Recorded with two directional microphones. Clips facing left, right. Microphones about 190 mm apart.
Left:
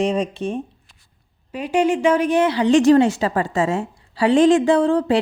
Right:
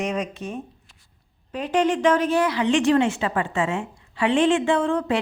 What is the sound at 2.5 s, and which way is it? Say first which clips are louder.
A woman's voice: left 6 dB; 35° left (ahead or behind).